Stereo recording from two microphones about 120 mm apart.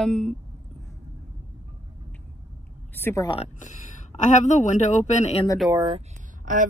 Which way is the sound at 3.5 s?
90° left.